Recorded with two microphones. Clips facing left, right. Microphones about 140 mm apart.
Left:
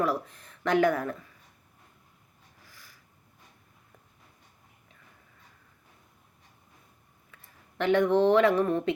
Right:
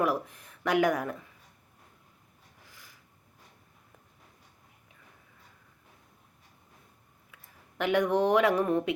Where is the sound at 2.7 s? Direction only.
20° right (ahead or behind).